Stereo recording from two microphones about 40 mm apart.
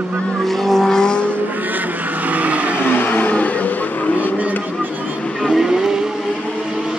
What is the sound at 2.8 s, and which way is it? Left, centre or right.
Vehicle, left.